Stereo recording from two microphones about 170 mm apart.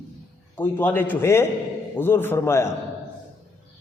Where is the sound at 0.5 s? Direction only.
10° left (ahead or behind).